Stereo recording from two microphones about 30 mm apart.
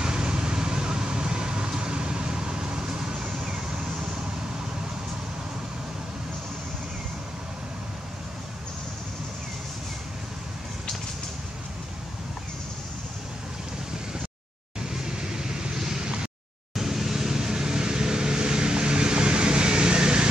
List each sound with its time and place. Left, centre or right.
0.0 s vehicle: right
14.8 s vehicle: right
16.7 s vehicle: centre; by 20.2 s right